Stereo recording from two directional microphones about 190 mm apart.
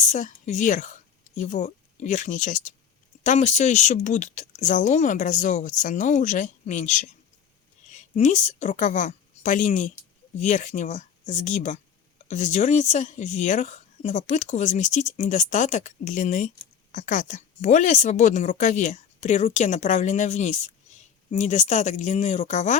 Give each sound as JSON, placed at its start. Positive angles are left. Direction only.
{"t": 0.1, "sound": "a woman's voice", "side_deg": 40}